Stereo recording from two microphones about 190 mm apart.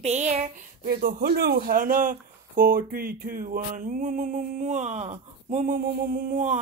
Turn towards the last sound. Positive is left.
turn(degrees=-40)  # may be behind; listen again after turning